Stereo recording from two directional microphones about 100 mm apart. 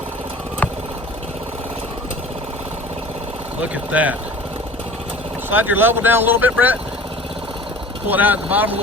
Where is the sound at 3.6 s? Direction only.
15° right (ahead or behind).